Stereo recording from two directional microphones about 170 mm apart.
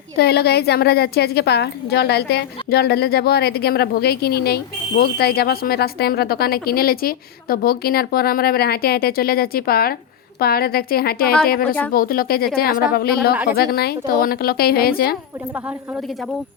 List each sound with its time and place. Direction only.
0.2 s a woman's voice: 65° left (ahead or behind)